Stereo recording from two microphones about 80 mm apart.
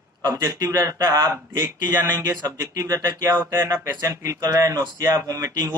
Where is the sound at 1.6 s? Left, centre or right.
Right.